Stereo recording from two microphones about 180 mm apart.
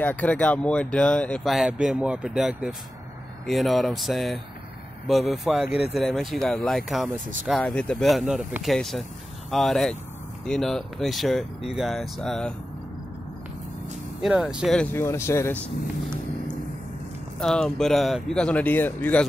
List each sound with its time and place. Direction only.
0.0 s speech: 10° left (ahead or behind)
14.2 s speech: 5° right (ahead or behind)
14.9 s speech: 15° left (ahead or behind)
17.4 s speech: 5° left (ahead or behind)